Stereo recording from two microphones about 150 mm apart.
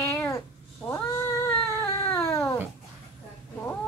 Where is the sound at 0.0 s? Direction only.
20° left (ahead or behind).